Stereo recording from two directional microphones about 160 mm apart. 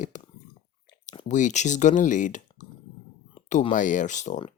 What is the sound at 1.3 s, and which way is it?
Speech, 50° left (ahead or behind).